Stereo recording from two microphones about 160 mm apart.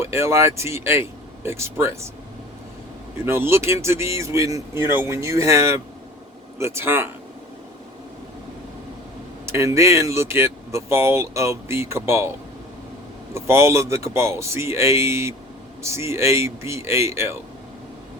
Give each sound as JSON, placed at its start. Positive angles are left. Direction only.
{"t": 0.0, "sound": "speech", "side_deg": -15}
{"t": 3.2, "sound": "speech", "side_deg": -15}
{"t": 9.5, "sound": "speech", "side_deg": -20}
{"t": 13.3, "sound": "speech", "side_deg": -15}